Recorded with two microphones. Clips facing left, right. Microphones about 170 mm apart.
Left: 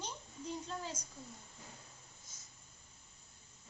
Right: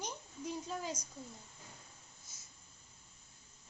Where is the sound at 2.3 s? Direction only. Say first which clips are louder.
Even; 10° right (ahead or behind).